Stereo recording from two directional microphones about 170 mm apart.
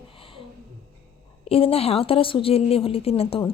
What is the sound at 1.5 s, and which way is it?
A woman's voice, 35° left (ahead or behind).